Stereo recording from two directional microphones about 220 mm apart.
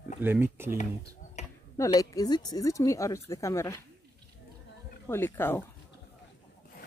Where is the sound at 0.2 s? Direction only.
10° right (ahead or behind).